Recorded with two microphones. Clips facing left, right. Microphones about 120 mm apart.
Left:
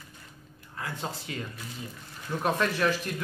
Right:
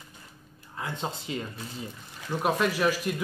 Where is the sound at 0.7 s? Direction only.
20° right (ahead or behind).